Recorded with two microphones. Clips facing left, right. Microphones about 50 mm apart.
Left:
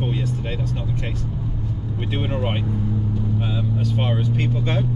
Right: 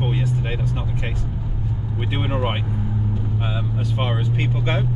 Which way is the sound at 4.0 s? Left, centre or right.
Centre.